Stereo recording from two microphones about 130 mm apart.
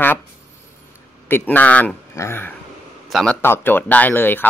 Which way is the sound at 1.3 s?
15° left (ahead or behind).